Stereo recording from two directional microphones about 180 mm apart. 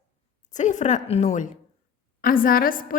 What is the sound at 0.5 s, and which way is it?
A woman's voice, 45° left (ahead or behind).